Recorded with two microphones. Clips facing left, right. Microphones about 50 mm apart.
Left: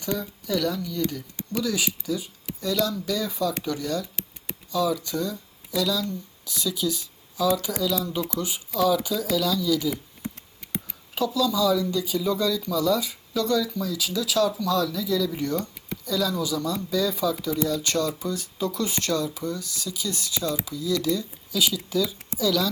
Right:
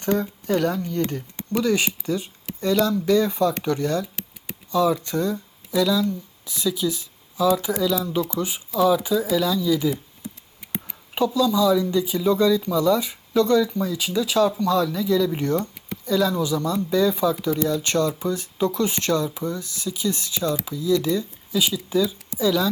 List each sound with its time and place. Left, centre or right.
0.0 s speech: right
4.0 s a sound: centre
4.7 s speech: right
5.7 s speech: centre
10.6 s a sound: centre
11.3 s speech: centre